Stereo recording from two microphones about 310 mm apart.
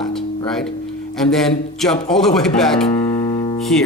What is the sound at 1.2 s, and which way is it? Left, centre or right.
Speech, centre.